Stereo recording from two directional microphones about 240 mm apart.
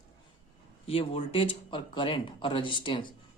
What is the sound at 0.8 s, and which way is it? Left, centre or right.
Speech, left.